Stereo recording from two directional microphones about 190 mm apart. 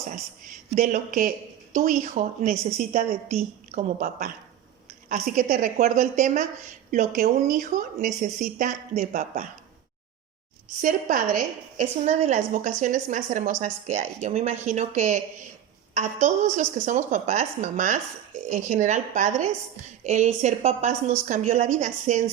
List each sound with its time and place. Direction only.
0.1 s a woman's voice: 45° right (ahead or behind)
10.8 s a woman's voice: 45° right (ahead or behind)